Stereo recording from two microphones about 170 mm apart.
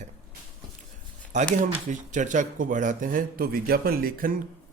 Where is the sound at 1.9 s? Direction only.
45° right (ahead or behind).